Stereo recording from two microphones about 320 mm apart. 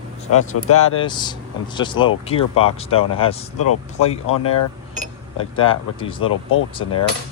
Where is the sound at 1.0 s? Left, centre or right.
Centre.